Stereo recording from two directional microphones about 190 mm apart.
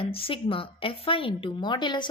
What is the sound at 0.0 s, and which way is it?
A woman's voice, 30° left (ahead or behind).